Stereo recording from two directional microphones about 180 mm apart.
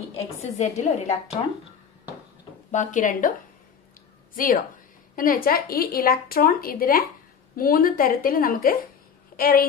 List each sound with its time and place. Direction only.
0.6 s a woman's voice: 40° left (ahead or behind)
2.7 s speech: 45° left (ahead or behind)
4.4 s speech: 50° left (ahead or behind)